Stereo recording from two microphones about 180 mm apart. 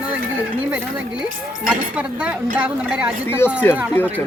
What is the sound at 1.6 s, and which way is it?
A woman's voice, 5° right (ahead or behind).